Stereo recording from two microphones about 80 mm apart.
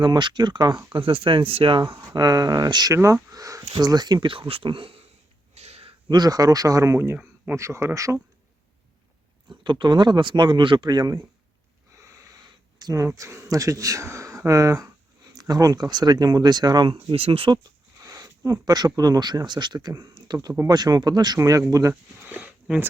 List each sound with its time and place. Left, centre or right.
0.0 s speech: right
0.9 s speech: right
2.1 s speech: right
2.9 s speech: right
6.1 s speech: right
9.6 s speech: right
11.9 s wheeze: right
12.4 s a sound: right
12.9 s speech: right
15.4 s speech: right
18.0 s speech: right
22.2 s a sound: centre